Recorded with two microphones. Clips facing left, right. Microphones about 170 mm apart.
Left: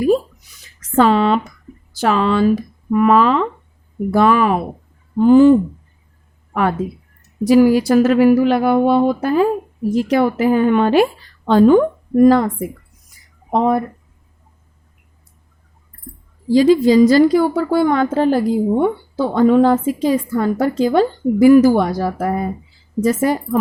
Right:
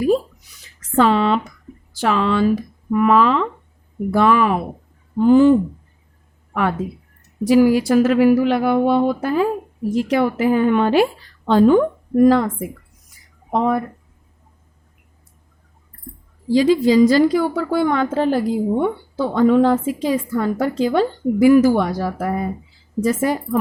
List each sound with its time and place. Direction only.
0.9 s a woman's voice: 40° left (ahead or behind)
12.2 s a woman's voice: 40° left (ahead or behind)
13.5 s a woman's voice: 35° left (ahead or behind)
16.5 s a woman's voice: 45° left (ahead or behind)